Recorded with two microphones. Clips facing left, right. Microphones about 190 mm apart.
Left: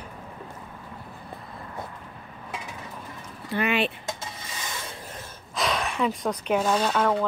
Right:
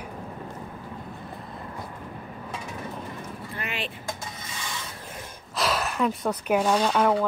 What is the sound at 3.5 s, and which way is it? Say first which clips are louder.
Speech: left 11 dB; 70° left (ahead or behind).